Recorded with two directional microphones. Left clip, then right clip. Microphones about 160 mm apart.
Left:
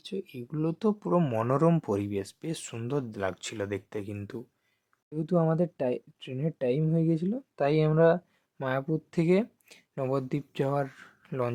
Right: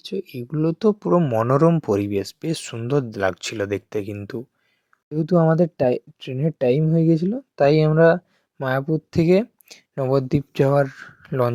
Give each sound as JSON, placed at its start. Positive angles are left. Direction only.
{"t": 0.0, "sound": "speech", "side_deg": -35}